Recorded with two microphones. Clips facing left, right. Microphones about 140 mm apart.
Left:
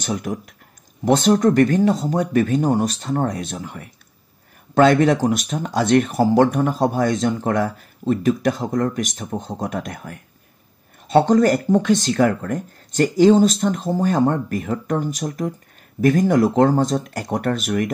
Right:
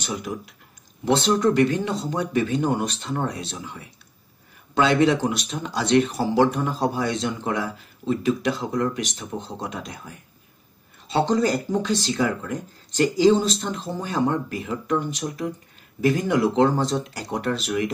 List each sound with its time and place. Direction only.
0.0 s speech: 50° left (ahead or behind)